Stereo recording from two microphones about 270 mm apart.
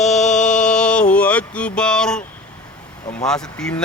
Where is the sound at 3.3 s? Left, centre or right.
Centre.